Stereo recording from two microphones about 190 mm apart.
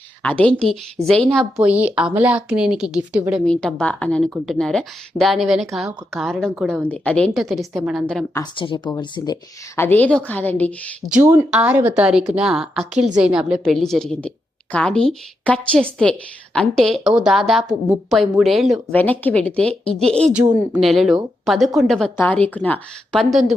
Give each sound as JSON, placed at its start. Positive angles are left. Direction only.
{"t": 0.2, "sound": "a woman's voice", "side_deg": 5}
{"t": 3.4, "sound": "a woman's voice", "side_deg": 5}
{"t": 8.3, "sound": "a woman's voice", "side_deg": 20}
{"t": 11.1, "sound": "a woman's voice", "side_deg": -10}